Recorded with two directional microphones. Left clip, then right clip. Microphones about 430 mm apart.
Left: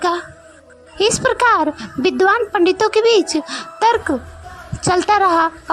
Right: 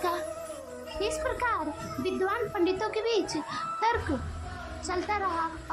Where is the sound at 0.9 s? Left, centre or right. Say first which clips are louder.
Left 15 dB; centre.